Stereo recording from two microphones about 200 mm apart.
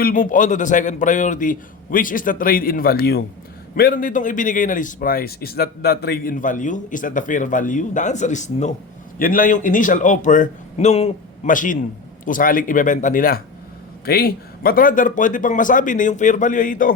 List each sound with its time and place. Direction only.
0.0 s a man's voice: 40° left (ahead or behind)